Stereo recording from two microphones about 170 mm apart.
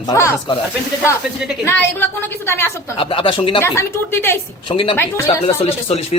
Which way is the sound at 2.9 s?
30° left (ahead or behind).